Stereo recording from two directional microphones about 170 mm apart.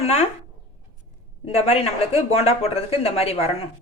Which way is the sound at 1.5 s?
35° left (ahead or behind).